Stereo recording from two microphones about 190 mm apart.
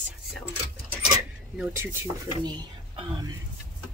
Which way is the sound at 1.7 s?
10° right (ahead or behind).